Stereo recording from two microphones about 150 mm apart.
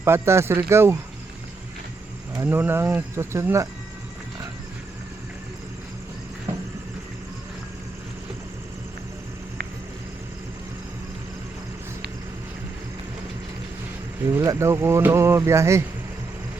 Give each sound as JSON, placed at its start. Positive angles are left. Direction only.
{"t": 0.0, "sound": "speech", "side_deg": -15}
{"t": 2.4, "sound": "speech", "side_deg": -15}
{"t": 14.3, "sound": "speech", "side_deg": -20}